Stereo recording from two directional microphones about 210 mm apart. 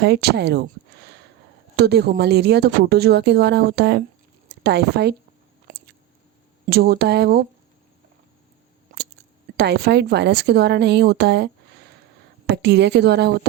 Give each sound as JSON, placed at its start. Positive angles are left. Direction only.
{"t": 0.0, "sound": "speech", "side_deg": -50}
{"t": 1.7, "sound": "speech", "side_deg": -50}
{"t": 5.7, "sound": "a sound", "side_deg": -40}
{"t": 6.7, "sound": "speech", "side_deg": -45}
{"t": 9.6, "sound": "speech", "side_deg": -50}
{"t": 12.6, "sound": "speech", "side_deg": -55}